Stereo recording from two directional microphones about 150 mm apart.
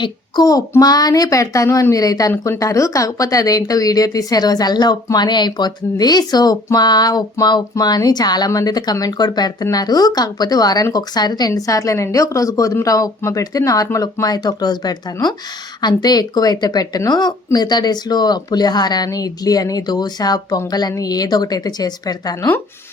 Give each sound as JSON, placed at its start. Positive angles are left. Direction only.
{"t": 0.0, "sound": "a child's voice", "side_deg": 25}